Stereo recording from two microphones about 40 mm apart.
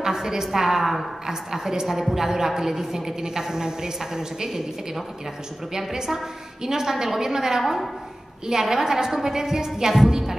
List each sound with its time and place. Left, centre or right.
0.0 s a woman's voice: centre